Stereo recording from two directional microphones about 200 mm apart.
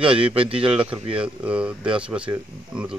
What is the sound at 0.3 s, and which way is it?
A man's voice, 25° right (ahead or behind).